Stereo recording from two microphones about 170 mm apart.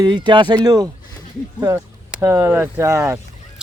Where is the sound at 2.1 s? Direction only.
15° right (ahead or behind).